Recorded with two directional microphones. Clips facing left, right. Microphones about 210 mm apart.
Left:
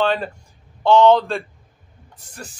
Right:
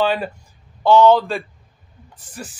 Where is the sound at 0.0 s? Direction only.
5° right (ahead or behind).